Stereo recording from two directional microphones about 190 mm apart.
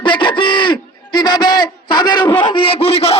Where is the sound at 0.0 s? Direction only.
25° left (ahead or behind).